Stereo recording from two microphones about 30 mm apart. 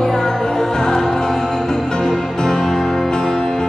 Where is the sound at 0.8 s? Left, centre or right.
Centre.